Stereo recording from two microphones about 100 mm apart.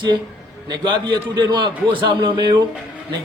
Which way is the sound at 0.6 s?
45° right (ahead or behind).